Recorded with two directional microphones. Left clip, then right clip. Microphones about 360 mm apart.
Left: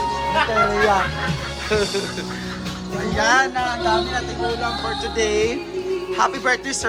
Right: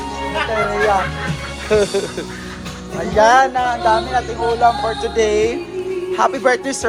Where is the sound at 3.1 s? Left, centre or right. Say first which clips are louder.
Right 6 dB; centre.